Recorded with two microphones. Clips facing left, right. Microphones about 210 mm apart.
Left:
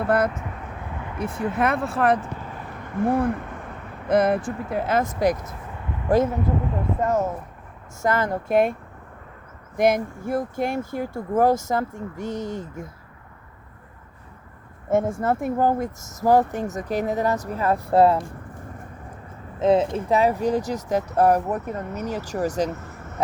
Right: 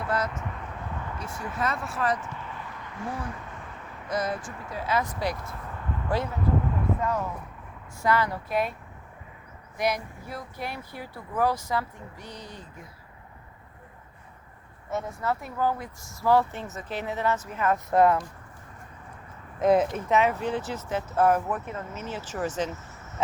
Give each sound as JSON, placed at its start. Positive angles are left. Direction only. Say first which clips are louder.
{"t": 0.1, "sound": "speech", "louder": "left 7 dB", "side_deg": 55}
{"t": 9.7, "sound": "speech", "louder": "left 8 dB", "side_deg": 50}
{"t": 14.8, "sound": "speech", "louder": "left 8 dB", "side_deg": 50}
{"t": 19.5, "sound": "speech", "louder": "left 3 dB", "side_deg": 25}
{"t": 22.7, "sound": "vehicle", "louder": "left 6 dB", "side_deg": 55}